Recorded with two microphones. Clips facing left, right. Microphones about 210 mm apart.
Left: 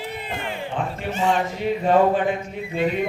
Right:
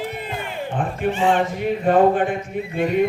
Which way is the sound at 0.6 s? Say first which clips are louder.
Right 6 dB; 50° right (ahead or behind).